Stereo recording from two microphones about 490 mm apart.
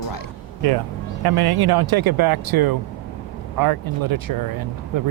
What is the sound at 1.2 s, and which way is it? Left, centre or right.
Speech, right.